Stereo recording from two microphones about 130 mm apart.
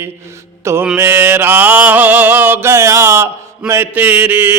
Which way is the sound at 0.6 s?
20° right (ahead or behind).